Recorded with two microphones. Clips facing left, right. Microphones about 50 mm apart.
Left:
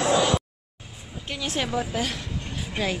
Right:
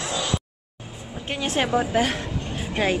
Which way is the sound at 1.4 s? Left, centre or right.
Right.